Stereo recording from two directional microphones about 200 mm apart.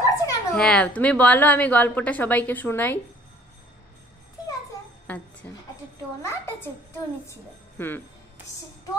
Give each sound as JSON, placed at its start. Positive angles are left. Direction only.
{"t": 0.0, "sound": "a sound", "side_deg": 15}
{"t": 0.6, "sound": "a woman's voice", "side_deg": 5}
{"t": 5.0, "sound": "a woman's voice", "side_deg": 10}